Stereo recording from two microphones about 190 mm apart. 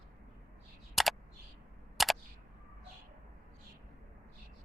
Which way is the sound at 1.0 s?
Centre (ahead or behind).